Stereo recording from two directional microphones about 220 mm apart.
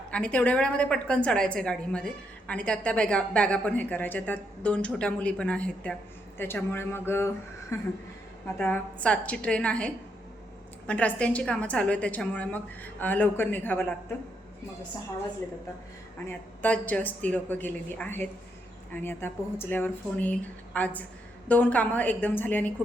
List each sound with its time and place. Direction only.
0.1 s a woman's voice: 5° left (ahead or behind)
16.2 s a woman's voice: 5° left (ahead or behind)